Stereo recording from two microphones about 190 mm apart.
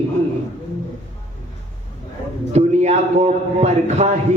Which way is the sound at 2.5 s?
35° right (ahead or behind).